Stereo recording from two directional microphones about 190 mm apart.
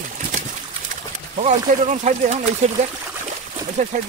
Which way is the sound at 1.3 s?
35° right (ahead or behind).